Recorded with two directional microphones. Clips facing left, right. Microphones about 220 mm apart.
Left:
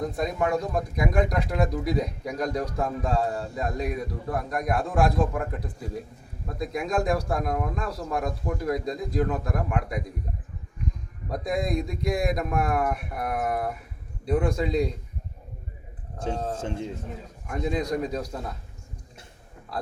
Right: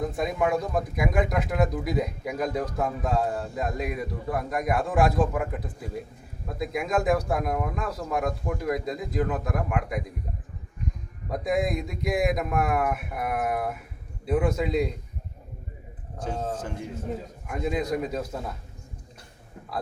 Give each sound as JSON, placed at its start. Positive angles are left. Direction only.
{"t": 0.0, "sound": "speech", "side_deg": -5}
{"t": 11.3, "sound": "speech", "side_deg": -5}
{"t": 16.3, "sound": "speech", "side_deg": -5}
{"t": 16.6, "sound": "speech", "side_deg": 25}
{"t": 17.4, "sound": "speech", "side_deg": -5}